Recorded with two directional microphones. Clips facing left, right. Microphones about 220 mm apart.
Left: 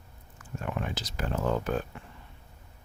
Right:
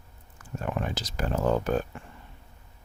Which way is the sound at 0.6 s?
40° right (ahead or behind).